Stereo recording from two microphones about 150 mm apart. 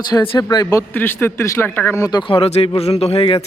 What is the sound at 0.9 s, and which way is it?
Speech, 15° left (ahead or behind).